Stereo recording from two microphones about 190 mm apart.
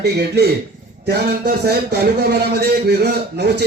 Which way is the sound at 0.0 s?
60° right (ahead or behind).